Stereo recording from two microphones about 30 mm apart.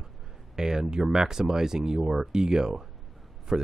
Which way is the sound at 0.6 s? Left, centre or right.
Right.